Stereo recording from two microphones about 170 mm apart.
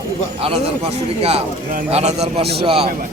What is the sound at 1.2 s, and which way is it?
A man's voice, 35° right (ahead or behind).